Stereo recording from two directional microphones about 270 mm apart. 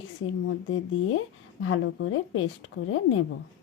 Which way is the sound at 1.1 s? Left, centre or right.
Left.